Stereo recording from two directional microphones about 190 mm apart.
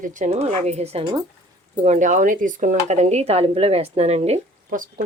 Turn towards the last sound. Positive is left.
turn(degrees=-45)  # may be behind; listen again after turning